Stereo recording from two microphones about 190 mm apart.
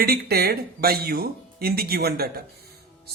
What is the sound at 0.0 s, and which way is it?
A man's voice, 55° right (ahead or behind).